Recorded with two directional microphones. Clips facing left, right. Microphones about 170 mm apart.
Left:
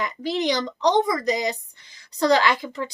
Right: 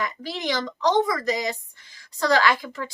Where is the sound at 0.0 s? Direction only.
20° left (ahead or behind).